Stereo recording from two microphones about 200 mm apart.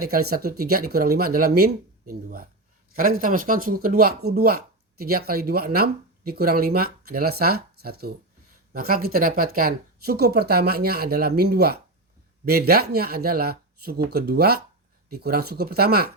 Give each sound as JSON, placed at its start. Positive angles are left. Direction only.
{"t": 0.1, "sound": "speech", "side_deg": -50}